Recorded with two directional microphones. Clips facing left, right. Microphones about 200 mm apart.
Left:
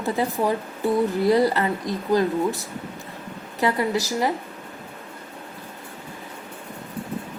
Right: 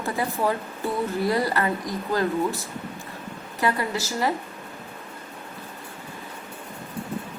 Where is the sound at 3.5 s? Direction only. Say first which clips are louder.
Left 3 dB; 20° left (ahead or behind).